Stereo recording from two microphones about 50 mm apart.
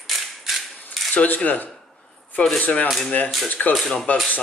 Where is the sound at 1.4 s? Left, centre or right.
Left.